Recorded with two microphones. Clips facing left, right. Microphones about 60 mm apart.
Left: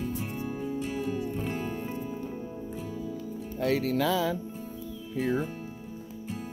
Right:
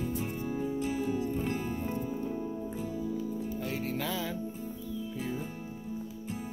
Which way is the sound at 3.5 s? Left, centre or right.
Left.